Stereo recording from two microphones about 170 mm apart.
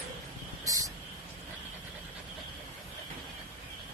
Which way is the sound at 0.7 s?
20° right (ahead or behind).